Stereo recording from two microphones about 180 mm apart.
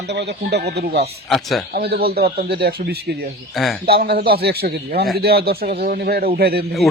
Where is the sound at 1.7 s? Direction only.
60° right (ahead or behind).